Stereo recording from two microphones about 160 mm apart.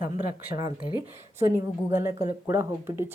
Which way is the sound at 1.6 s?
20° right (ahead or behind).